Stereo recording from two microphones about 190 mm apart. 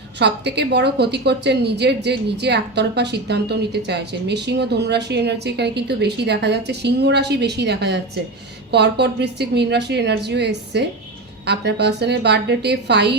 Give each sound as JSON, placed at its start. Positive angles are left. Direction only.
{"t": 0.2, "sound": "a woman's voice", "side_deg": -60}